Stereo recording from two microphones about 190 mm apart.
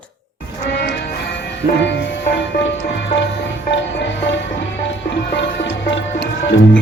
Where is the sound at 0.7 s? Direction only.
60° left (ahead or behind).